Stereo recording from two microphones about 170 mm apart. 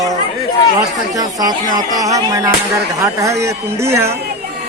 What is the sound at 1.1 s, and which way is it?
Speech, 20° right (ahead or behind).